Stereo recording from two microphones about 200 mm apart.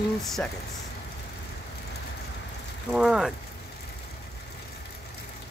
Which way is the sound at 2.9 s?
Centre (ahead or behind).